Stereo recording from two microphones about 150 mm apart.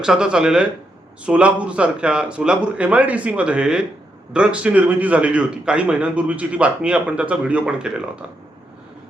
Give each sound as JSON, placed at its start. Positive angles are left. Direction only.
{"t": 0.0, "sound": "speech", "side_deg": -5}